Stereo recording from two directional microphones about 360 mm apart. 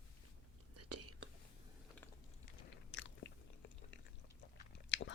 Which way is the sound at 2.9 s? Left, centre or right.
Left.